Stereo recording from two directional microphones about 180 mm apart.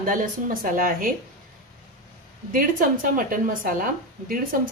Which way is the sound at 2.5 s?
50° right (ahead or behind).